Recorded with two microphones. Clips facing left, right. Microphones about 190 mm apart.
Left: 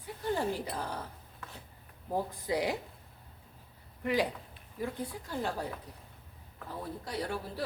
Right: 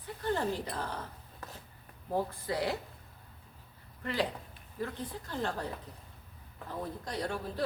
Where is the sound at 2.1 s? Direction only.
15° left (ahead or behind).